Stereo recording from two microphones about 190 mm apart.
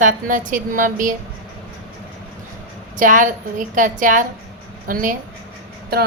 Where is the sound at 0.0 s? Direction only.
45° right (ahead or behind).